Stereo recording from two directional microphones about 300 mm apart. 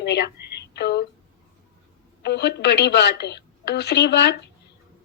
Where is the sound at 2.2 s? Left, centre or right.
Left.